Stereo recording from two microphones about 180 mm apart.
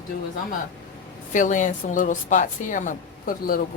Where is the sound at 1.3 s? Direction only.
45° left (ahead or behind).